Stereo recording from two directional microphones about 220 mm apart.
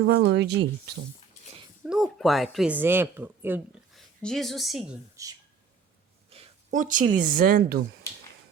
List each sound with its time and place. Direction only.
0.0 s speech: 50° right (ahead or behind)
1.8 s speech: centre (ahead or behind)
4.2 s a woman's voice: centre (ahead or behind)
5.1 s speech: 15° right (ahead or behind)
6.3 s speech: 30° right (ahead or behind)